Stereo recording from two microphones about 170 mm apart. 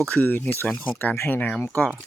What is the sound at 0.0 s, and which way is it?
Speech, 10° left (ahead or behind).